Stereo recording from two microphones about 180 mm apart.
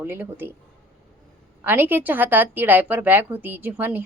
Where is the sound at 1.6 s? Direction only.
10° right (ahead or behind).